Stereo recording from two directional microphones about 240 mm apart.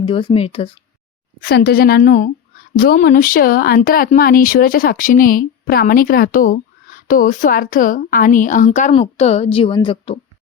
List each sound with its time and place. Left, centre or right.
0.0 s speech: left
1.4 s speech: left